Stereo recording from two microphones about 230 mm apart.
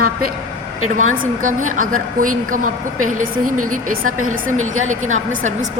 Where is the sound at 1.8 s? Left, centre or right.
Right.